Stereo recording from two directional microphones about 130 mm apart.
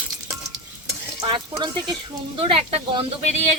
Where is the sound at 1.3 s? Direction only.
40° right (ahead or behind).